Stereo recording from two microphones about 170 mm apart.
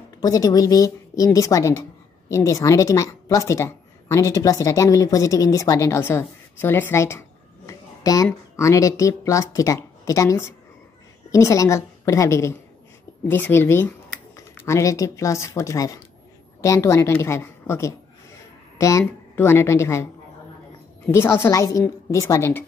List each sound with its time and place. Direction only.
0.2 s a woman's voice: 20° left (ahead or behind)